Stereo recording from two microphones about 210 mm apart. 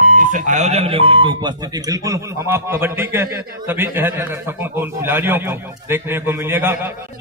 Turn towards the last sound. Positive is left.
turn(degrees=-10)  # may be behind; listen again after turning